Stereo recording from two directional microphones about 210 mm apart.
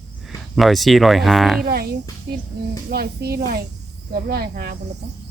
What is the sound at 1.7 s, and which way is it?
A child's voice, 50° right (ahead or behind).